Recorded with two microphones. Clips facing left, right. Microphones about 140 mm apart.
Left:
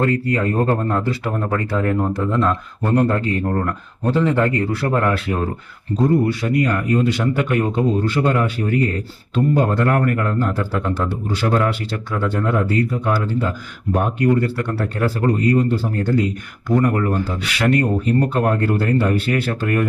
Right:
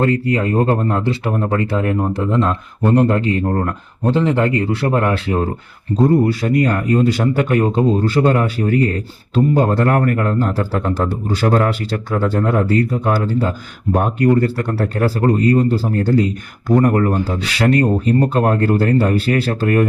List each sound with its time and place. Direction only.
0.0 s speech: 25° right (ahead or behind)
6.0 s speech: 35° right (ahead or behind)
17.4 s speech: 35° right (ahead or behind)